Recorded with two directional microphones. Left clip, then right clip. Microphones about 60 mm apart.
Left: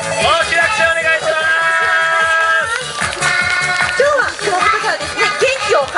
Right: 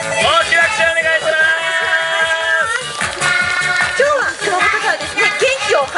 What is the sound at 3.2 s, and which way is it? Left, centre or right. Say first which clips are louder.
Music: even; right.